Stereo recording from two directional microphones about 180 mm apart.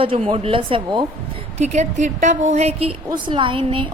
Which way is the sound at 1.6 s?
40° right (ahead or behind).